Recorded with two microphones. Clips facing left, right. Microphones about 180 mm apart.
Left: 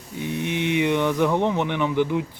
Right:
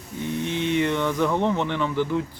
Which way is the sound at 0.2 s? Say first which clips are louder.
Left 1 dB; 15° left (ahead or behind).